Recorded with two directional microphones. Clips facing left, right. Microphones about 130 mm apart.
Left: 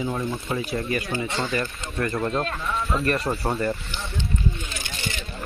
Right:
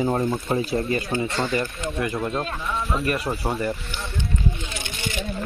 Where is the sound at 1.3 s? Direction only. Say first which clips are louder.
Right 2 dB; 10° right (ahead or behind).